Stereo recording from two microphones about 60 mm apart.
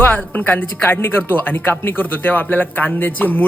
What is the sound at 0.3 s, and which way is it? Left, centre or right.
Speech, left.